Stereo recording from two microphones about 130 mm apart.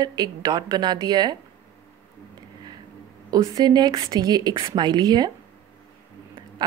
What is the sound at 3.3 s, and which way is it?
A woman's voice, 25° right (ahead or behind).